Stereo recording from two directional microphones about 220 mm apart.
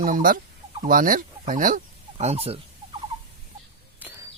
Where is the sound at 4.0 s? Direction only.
10° right (ahead or behind).